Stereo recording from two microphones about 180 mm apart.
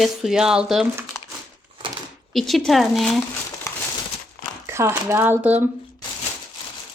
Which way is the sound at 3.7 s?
15° left (ahead or behind).